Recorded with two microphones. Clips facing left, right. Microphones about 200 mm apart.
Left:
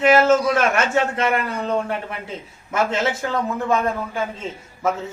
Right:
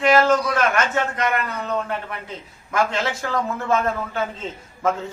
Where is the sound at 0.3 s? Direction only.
25° left (ahead or behind).